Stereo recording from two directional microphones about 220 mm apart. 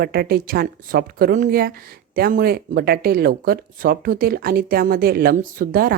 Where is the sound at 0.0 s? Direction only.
45° right (ahead or behind).